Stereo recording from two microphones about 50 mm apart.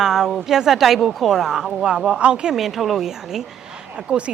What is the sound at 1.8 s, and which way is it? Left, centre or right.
Speech, centre.